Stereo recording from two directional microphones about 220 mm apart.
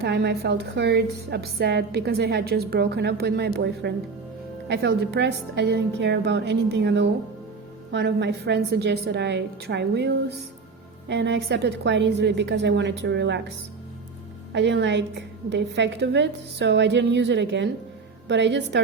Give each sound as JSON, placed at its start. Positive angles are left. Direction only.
{"t": 0.0, "sound": "a woman's voice", "side_deg": -50}
{"t": 14.5, "sound": "a woman's voice", "side_deg": -50}